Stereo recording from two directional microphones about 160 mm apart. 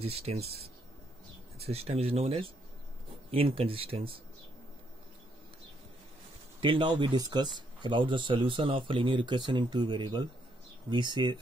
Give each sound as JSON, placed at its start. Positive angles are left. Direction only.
{"t": 0.0, "sound": "speech", "side_deg": -40}
{"t": 1.7, "sound": "speech", "side_deg": -40}
{"t": 6.6, "sound": "speech", "side_deg": -30}